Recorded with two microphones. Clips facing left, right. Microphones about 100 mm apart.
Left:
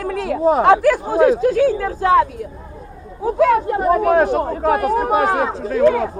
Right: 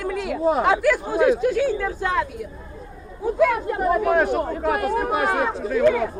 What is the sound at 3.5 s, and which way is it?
Speech, 30° left (ahead or behind).